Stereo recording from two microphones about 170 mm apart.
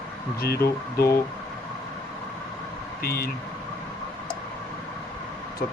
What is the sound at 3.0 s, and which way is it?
Speech, 65° left (ahead or behind).